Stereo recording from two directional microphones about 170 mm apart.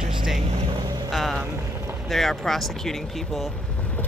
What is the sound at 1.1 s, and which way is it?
Vehicle, centre (ahead or behind).